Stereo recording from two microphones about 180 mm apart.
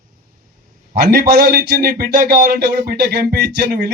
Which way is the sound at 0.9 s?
60° right (ahead or behind).